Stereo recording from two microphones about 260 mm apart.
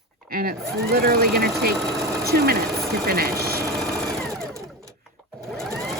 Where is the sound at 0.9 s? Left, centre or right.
Right.